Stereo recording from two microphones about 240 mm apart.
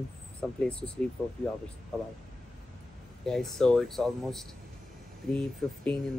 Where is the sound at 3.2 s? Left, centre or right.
Centre.